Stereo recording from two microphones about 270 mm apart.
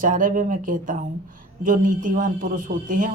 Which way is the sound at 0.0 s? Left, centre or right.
Right.